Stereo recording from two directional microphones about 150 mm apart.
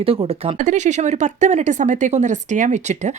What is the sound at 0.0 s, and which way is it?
A woman's voice, 40° right (ahead or behind).